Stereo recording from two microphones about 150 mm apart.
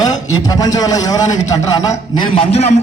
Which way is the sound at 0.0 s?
25° left (ahead or behind).